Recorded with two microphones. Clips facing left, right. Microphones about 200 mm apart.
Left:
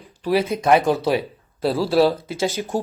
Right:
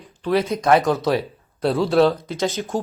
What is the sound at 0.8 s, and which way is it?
Speech, 25° left (ahead or behind).